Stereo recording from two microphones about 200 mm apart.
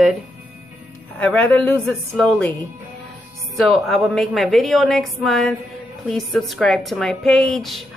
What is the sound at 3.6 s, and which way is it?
A woman's voice, centre (ahead or behind).